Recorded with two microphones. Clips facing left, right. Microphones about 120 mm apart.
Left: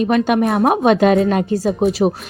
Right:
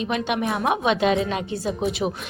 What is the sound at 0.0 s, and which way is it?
A woman's voice, 50° left (ahead or behind).